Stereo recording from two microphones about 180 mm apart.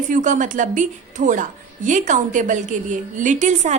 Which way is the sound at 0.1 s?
45° right (ahead or behind).